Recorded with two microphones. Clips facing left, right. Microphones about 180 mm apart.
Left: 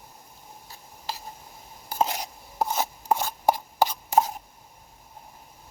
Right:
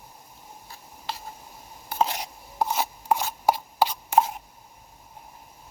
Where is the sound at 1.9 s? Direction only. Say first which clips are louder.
Right 1 dB; 40° left (ahead or behind).